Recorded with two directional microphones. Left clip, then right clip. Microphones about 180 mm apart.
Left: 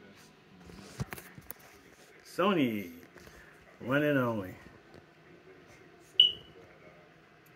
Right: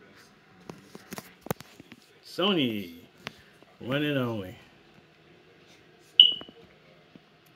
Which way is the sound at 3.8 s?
80° right.